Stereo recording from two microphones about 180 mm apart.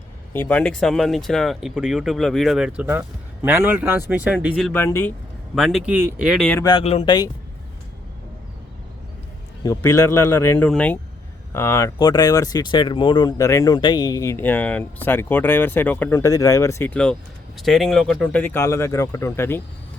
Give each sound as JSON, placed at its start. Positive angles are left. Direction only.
{"t": 0.3, "sound": "speech", "side_deg": 10}
{"t": 4.5, "sound": "speech", "side_deg": 5}
{"t": 5.5, "sound": "speech", "side_deg": 0}
{"t": 6.7, "sound": "speech", "side_deg": 30}
{"t": 9.6, "sound": "speech", "side_deg": 20}